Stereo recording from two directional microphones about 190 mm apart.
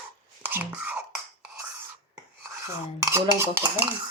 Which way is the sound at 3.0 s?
15° right (ahead or behind).